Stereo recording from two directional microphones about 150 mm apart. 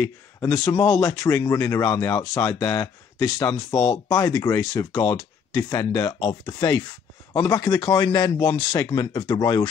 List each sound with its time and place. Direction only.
0.0 s speech: 20° left (ahead or behind)